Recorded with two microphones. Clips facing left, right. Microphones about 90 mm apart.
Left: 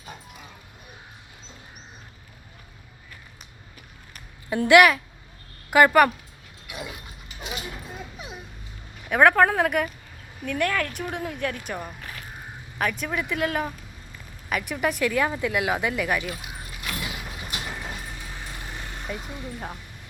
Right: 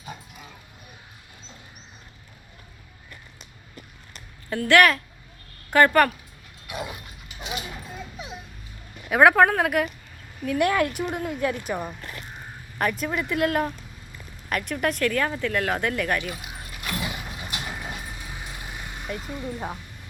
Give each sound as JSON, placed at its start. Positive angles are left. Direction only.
{"t": 4.4, "sound": "a woman's voice", "side_deg": 15}
{"t": 6.7, "sound": "dog", "side_deg": -25}
{"t": 9.0, "sound": "a woman's voice", "side_deg": -5}
{"t": 10.7, "sound": "speech", "side_deg": -20}
{"t": 11.1, "sound": "a woman's voice", "side_deg": -5}
{"t": 17.1, "sound": "vehicle", "side_deg": 0}
{"t": 19.1, "sound": "a woman's voice", "side_deg": 5}
{"t": 19.5, "sound": "speech", "side_deg": -10}